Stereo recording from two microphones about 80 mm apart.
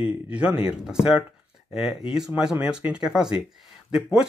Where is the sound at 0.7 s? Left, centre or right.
Centre.